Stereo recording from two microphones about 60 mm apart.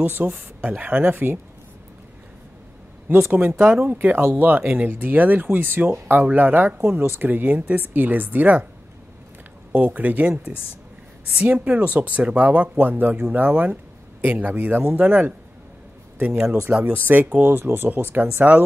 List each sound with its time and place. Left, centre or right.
0.0 s speech: right
3.3 s speech: right
9.7 s speech: right
11.3 s speech: right
17.4 s speech: right